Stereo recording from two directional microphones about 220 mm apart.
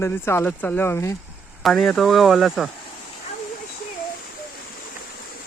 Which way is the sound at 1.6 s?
Centre (ahead or behind).